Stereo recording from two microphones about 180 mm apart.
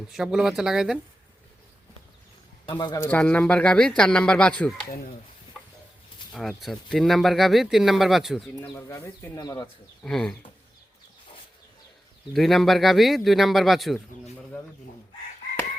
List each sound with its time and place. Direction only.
0.1 s speech: 5° right (ahead or behind)
2.6 s speech: 25° left (ahead or behind)
3.0 s speech: 5° left (ahead or behind)
6.3 s speech: centre (ahead or behind)
8.7 s speech: 15° left (ahead or behind)
10.0 s speech: centre (ahead or behind)
12.3 s speech: centre (ahead or behind)